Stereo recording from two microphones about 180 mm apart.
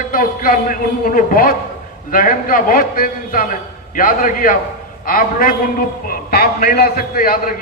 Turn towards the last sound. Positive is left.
turn(degrees=50)  # may be behind; listen again after turning